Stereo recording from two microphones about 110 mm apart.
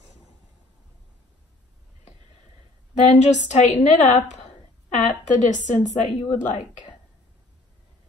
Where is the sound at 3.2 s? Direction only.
90° left.